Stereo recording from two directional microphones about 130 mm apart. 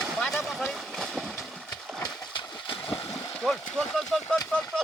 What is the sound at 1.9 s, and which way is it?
Horse, 5° left (ahead or behind).